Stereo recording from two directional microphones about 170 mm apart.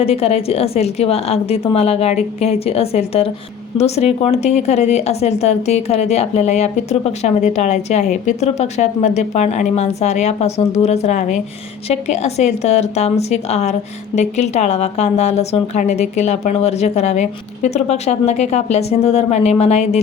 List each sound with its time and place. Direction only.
0.0 s a woman's voice: 35° left (ahead or behind)